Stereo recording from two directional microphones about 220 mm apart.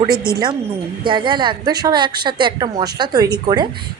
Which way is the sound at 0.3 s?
20° right (ahead or behind).